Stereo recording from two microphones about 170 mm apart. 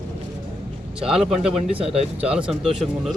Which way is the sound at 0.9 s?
5° right (ahead or behind).